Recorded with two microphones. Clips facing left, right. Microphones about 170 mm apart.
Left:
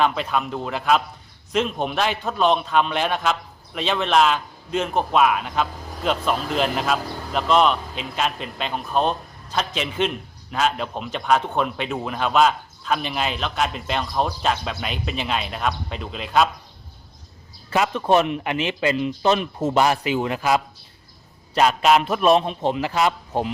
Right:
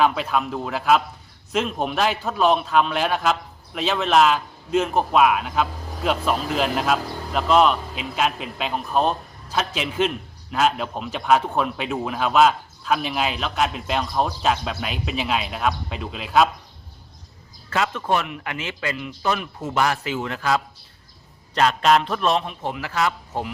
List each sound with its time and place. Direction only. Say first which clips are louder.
0.0 s a man's voice: right 1 dB; 5° right (ahead or behind)
17.7 s a man's voice: left 3 dB; 15° left (ahead or behind)